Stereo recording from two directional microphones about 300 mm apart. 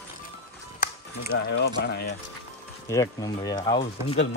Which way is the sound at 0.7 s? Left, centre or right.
Left.